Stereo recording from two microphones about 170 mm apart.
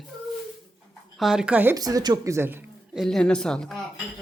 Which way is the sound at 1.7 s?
20° right (ahead or behind).